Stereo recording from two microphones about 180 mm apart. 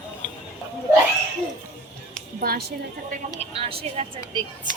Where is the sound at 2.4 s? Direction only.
60° right (ahead or behind).